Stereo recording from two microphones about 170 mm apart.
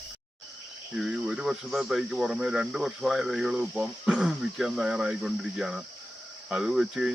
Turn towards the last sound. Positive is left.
turn(degrees=-5)  # may be behind; listen again after turning